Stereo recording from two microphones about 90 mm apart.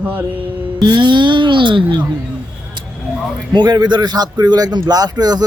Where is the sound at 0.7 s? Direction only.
55° right (ahead or behind).